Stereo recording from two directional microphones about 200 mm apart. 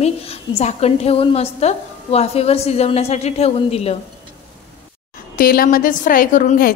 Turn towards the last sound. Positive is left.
turn(degrees=45)  # may be behind; listen again after turning